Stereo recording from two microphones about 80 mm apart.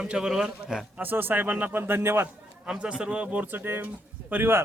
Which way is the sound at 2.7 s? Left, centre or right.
Centre.